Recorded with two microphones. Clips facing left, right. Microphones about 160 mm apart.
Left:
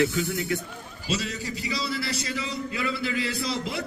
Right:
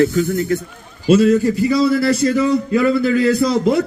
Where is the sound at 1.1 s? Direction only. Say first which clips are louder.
Right 19 dB; 55° right (ahead or behind).